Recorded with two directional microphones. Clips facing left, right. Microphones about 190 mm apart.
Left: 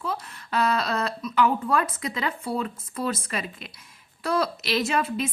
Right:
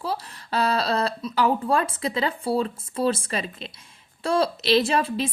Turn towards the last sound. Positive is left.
turn(degrees=-30)  # may be behind; listen again after turning